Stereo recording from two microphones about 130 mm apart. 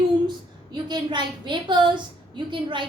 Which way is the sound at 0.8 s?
35° right (ahead or behind).